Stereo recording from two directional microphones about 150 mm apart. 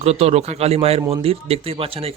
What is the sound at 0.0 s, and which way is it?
Speech, 45° right (ahead or behind).